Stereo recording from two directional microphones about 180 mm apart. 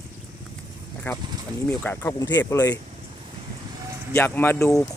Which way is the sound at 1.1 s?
10° left (ahead or behind).